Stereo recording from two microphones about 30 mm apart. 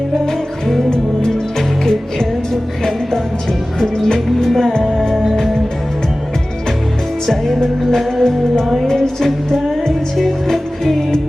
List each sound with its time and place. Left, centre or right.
1.5 s music: centre
3.8 s music: centre
4.4 s music: centre
7.3 s music: centre
8.9 s music: centre